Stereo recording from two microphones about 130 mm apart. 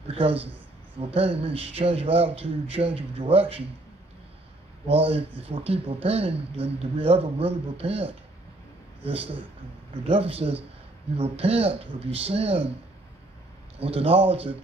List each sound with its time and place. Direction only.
0.1 s speech: 50° right (ahead or behind)
4.8 s speech: 50° right (ahead or behind)
13.7 s speech: 45° right (ahead or behind)